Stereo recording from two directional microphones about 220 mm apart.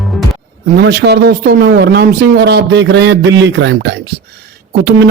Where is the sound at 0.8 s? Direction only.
50° right (ahead or behind).